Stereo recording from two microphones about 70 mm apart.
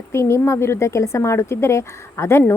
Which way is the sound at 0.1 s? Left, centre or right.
Left.